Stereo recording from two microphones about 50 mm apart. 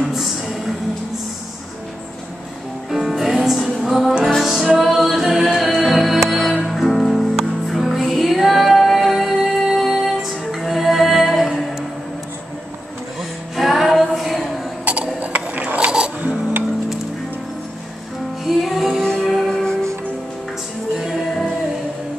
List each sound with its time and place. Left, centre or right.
0.1 s music: centre
2.9 s music: centre
4.7 s a capella: centre
5.7 s music: centre
13.6 s a capella: centre
15.1 s a sound: right
16.2 s filing: right
18.4 s music: centre
18.9 s music: centre
19.2 s music: centre
21.0 s music: centre